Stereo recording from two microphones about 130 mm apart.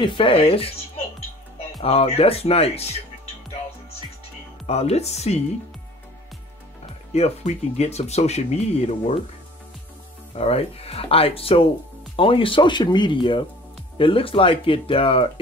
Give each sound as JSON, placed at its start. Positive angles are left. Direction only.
{"t": 0.0, "sound": "speech", "side_deg": 40}
{"t": 1.8, "sound": "speech", "side_deg": 50}
{"t": 4.6, "sound": "speech", "side_deg": 55}
{"t": 7.1, "sound": "speech", "side_deg": 55}
{"t": 10.3, "sound": "speech", "side_deg": 50}